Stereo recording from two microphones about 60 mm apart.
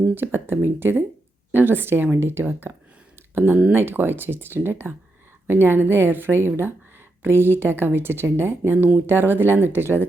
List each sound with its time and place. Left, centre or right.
0.0 s speech: right